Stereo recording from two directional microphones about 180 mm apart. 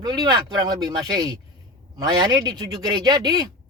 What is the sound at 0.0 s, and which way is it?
Speech, 25° right (ahead or behind).